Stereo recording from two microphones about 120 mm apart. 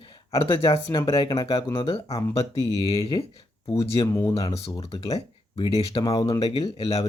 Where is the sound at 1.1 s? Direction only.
35° left (ahead or behind).